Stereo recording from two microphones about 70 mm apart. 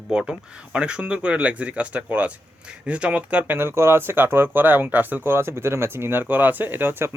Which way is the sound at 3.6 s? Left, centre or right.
Right.